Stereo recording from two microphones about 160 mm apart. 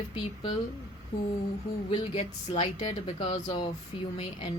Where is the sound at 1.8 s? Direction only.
35° left (ahead or behind).